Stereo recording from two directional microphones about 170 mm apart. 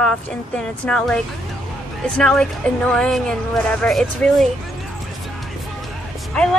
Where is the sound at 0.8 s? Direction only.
5° left (ahead or behind).